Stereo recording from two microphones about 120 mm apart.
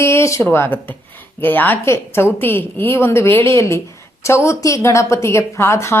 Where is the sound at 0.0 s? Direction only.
25° left (ahead or behind).